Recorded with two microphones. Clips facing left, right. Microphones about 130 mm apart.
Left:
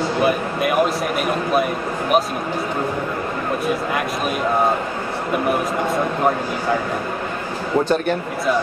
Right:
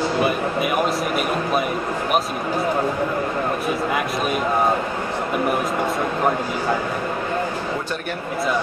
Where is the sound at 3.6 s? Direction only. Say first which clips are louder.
Left 1 dB; centre (ahead or behind).